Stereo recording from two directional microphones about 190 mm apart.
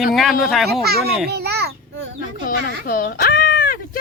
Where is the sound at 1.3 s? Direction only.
55° right (ahead or behind).